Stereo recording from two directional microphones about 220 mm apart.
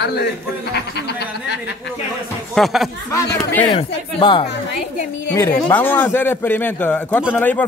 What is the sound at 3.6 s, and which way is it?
Speech, 20° left (ahead or behind).